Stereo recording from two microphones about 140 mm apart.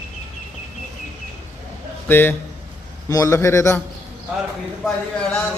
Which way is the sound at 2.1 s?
15° left (ahead or behind).